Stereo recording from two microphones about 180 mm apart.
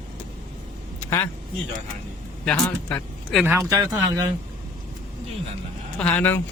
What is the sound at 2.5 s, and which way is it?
Speech, 5° left (ahead or behind).